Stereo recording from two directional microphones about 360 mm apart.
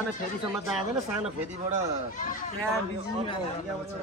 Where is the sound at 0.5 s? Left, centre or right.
Centre.